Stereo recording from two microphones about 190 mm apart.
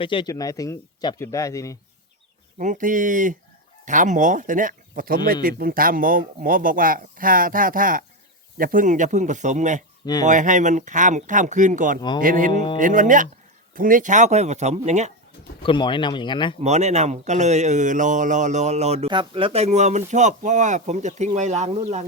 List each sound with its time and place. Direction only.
0.0 s speech: 25° left (ahead or behind)
2.6 s speech: 45° right (ahead or behind)
15.6 s speech: 25° left (ahead or behind)
16.6 s speech: 35° right (ahead or behind)